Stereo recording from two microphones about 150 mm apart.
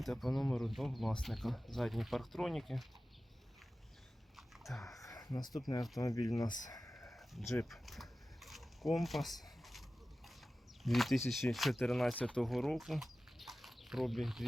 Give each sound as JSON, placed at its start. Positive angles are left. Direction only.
{"t": 0.0, "sound": "speech", "side_deg": 0}
{"t": 4.4, "sound": "biting", "side_deg": 0}
{"t": 4.9, "sound": "speech", "side_deg": 25}
{"t": 6.7, "sound": "a sound", "side_deg": 25}
{"t": 7.2, "sound": "sheep", "side_deg": 0}
{"t": 7.7, "sound": "a sound", "side_deg": 0}
{"t": 10.8, "sound": "speech", "side_deg": 0}